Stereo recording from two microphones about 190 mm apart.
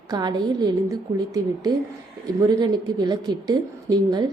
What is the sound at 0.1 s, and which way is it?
A woman's voice, 20° right (ahead or behind).